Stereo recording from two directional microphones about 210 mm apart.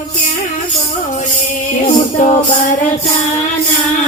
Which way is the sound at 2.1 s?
35° left (ahead or behind).